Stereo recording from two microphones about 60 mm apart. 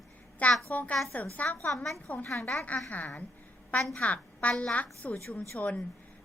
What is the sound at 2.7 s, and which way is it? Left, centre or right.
Speech, left.